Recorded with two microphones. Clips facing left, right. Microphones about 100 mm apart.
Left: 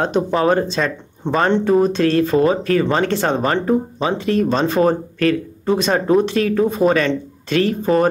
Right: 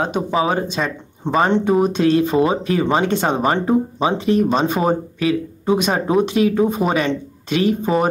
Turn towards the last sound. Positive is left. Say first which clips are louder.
# even
turn(degrees=-15)  # may be behind; listen again after turning